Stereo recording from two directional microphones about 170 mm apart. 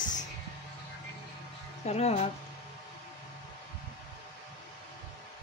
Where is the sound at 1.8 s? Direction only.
40° left (ahead or behind).